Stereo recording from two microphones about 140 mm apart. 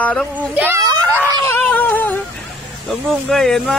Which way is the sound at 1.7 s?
15° left (ahead or behind).